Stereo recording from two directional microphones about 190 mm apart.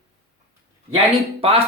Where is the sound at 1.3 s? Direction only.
30° right (ahead or behind).